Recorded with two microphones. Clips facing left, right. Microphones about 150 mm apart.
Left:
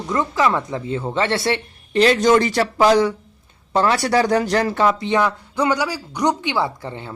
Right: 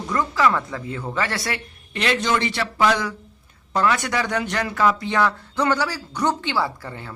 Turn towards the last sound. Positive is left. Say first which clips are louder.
# left 3 dB
turn(degrees=20)  # may be behind; listen again after turning